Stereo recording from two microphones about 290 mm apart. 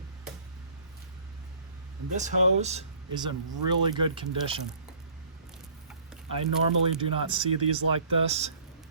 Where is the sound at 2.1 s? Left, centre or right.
Right.